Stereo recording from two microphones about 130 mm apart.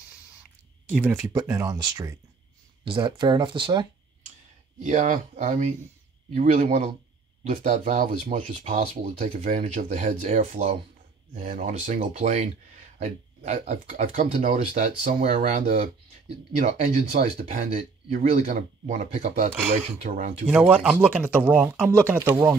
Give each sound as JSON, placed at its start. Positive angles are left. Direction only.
{"t": 0.8, "sound": "speech", "side_deg": -10}
{"t": 1.3, "sound": "speech", "side_deg": -25}
{"t": 4.8, "sound": "speech", "side_deg": -75}
{"t": 18.5, "sound": "speech", "side_deg": -75}
{"t": 20.4, "sound": "speech", "side_deg": -10}